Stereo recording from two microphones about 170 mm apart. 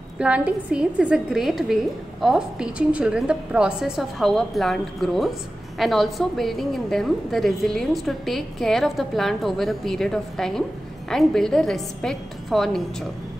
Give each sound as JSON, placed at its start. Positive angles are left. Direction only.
{"t": 0.2, "sound": "a woman's voice", "side_deg": -5}